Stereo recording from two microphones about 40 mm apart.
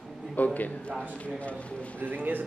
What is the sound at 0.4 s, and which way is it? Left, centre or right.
Speech, left.